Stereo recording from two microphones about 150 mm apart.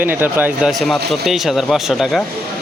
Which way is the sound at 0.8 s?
Centre (ahead or behind).